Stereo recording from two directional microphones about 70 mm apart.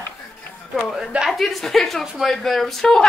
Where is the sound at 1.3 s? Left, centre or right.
Centre.